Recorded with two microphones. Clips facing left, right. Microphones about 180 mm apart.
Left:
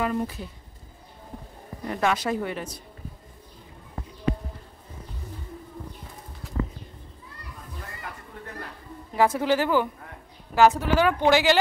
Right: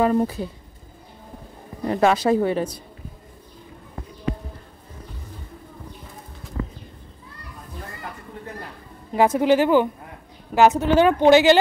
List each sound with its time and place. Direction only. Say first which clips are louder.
0.0 s speech: right 7 dB; 35° right (ahead or behind)
1.9 s speech: right 7 dB; 30° right (ahead or behind)
9.1 s speech: right 5 dB; 20° right (ahead or behind)